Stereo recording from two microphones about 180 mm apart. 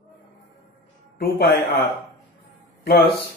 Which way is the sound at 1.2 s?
65° left (ahead or behind).